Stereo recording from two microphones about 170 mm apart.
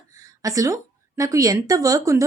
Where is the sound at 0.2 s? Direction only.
20° right (ahead or behind).